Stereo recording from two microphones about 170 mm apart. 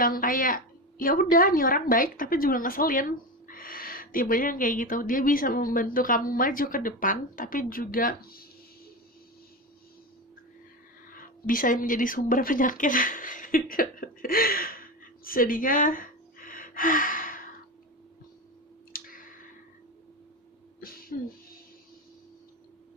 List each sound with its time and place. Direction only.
0.0 s a woman's voice: 55° left (ahead or behind)
11.1 s speech: 55° left (ahead or behind)
18.9 s clicking: 55° left (ahead or behind)
20.8 s music: 60° left (ahead or behind)